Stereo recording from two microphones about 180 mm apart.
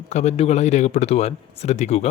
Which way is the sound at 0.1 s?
40° left (ahead or behind).